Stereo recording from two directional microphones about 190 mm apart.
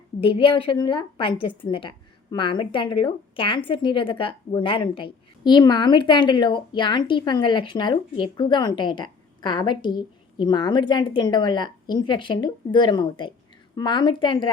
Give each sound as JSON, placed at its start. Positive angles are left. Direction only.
{"t": 0.2, "sound": "a woman's voice", "side_deg": 25}